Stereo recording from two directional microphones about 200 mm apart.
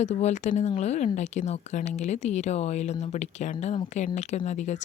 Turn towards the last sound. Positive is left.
turn(degrees=35)  # may be behind; listen again after turning